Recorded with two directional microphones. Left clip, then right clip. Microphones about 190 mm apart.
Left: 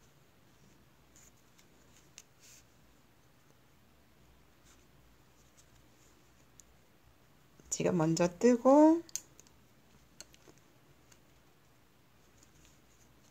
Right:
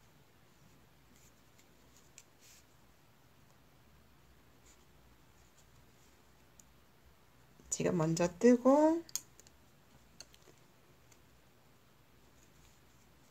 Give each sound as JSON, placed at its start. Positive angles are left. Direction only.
{"t": 7.7, "sound": "speech", "side_deg": 15}